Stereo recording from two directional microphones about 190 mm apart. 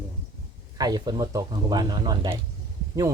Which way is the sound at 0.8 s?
20° right (ahead or behind).